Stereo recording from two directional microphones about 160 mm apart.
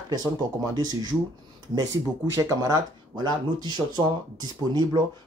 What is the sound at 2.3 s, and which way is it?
Speech, 20° right (ahead or behind).